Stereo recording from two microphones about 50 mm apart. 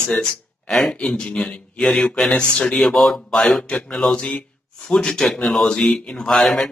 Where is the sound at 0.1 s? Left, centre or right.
Centre.